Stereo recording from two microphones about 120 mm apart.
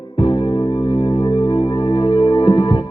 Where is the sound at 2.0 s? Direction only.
40° left (ahead or behind).